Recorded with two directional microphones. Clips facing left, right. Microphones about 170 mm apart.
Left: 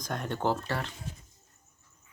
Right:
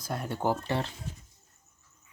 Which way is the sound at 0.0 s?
10° right (ahead or behind).